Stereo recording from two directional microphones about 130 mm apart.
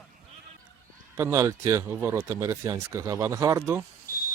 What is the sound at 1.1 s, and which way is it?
Speech, 20° right (ahead or behind).